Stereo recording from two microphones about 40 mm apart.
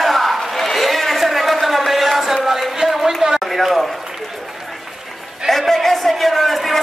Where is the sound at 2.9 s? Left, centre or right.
Centre.